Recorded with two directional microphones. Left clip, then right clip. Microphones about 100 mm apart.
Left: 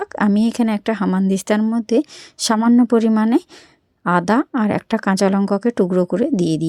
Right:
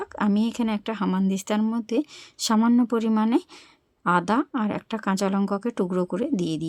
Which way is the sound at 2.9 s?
50° left (ahead or behind).